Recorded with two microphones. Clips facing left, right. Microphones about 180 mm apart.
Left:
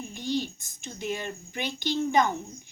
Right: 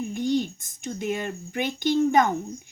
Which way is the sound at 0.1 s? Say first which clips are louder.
Right 4 dB; 50° right (ahead or behind).